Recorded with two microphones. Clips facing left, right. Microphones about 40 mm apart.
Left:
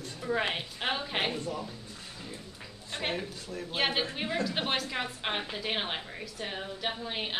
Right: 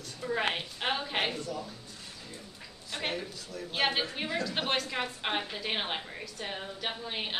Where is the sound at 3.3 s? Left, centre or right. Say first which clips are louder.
Left 2 dB; left.